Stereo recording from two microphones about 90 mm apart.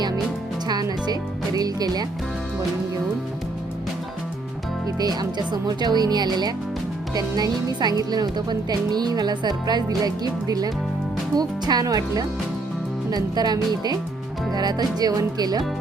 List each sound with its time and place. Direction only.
0.7 s music: 50° right (ahead or behind)
4.9 s speech: 45° right (ahead or behind)